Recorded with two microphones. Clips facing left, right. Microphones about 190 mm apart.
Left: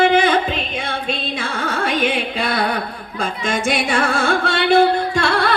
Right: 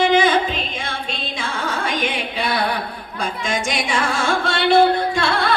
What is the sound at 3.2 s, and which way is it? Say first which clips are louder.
Music: left 2 dB; 55° left (ahead or behind).